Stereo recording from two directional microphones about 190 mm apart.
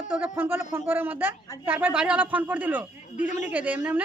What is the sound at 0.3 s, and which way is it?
A woman's voice, 10° right (ahead or behind).